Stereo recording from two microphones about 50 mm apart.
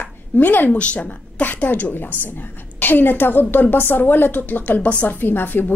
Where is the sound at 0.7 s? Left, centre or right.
Left.